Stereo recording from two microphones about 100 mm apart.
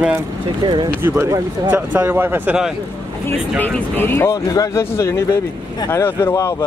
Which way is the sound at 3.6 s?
20° left (ahead or behind).